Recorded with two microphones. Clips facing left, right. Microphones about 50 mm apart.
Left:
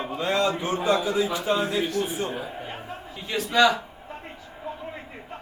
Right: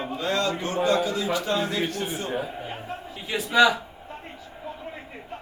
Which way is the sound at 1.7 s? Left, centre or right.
Right.